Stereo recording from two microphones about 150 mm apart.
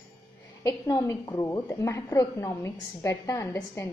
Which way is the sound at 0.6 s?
20° left (ahead or behind).